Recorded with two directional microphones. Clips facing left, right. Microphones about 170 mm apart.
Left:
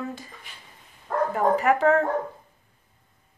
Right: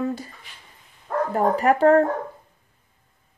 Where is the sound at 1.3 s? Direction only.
35° right (ahead or behind).